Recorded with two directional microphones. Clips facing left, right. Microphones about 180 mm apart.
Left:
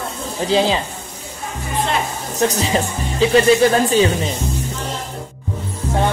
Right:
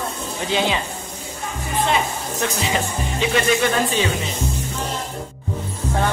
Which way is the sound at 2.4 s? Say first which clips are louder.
Left 6 dB; 40° left (ahead or behind).